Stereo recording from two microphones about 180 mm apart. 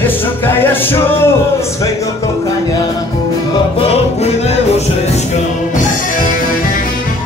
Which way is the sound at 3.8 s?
35° left (ahead or behind).